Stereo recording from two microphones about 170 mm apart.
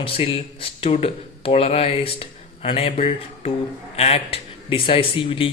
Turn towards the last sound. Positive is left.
turn(degrees=30)  # may be behind; listen again after turning